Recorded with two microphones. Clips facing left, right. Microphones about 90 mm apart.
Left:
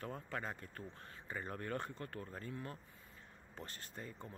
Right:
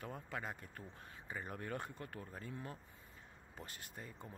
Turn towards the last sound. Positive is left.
turn(degrees=-10)  # may be behind; listen again after turning